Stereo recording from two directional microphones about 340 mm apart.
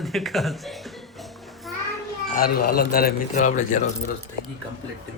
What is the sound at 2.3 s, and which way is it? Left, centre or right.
Speech, left.